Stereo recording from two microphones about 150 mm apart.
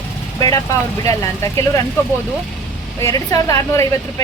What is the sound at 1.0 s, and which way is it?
Speech, 20° left (ahead or behind).